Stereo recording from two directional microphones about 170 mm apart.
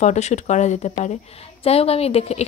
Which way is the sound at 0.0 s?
40° left (ahead or behind).